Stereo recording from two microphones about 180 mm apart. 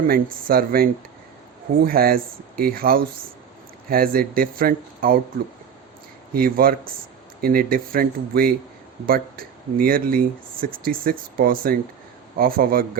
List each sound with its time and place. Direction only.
0.1 s speech: 55° right (ahead or behind)
6.3 s speech: 55° right (ahead or behind)